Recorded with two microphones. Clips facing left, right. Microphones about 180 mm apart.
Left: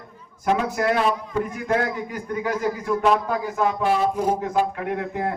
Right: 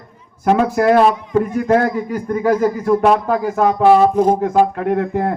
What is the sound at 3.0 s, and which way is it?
A man's voice, 60° right (ahead or behind).